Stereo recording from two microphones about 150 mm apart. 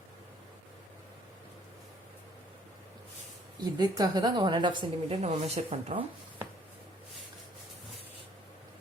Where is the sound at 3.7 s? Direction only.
25° right (ahead or behind).